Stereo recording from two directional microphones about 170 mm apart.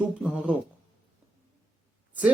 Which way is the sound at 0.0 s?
5° right (ahead or behind).